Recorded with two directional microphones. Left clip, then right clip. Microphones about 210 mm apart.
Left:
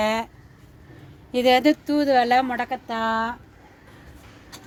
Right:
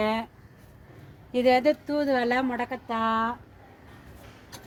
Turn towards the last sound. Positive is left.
turn(degrees=55)  # may be behind; listen again after turning